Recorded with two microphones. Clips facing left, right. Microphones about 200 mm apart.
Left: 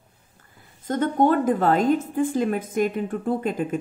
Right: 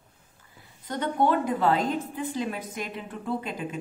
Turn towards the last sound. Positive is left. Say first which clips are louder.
# left 7 dB
turn(degrees=50)  # may be behind; listen again after turning